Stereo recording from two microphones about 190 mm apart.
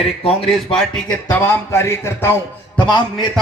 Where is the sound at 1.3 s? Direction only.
15° left (ahead or behind).